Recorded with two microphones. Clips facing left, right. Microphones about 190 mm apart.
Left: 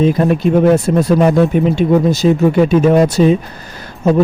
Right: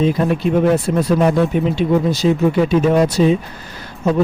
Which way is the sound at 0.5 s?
50° left (ahead or behind).